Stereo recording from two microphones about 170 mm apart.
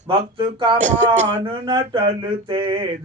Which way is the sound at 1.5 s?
30° right (ahead or behind).